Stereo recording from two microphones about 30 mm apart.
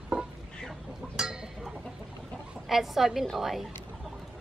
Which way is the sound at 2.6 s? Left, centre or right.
Centre.